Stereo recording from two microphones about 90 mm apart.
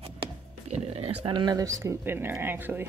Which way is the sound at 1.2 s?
65° right (ahead or behind).